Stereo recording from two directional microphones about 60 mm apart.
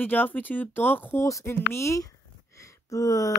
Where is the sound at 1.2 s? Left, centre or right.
Left.